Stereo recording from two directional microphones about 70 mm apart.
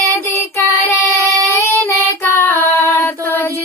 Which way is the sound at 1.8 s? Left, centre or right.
Left.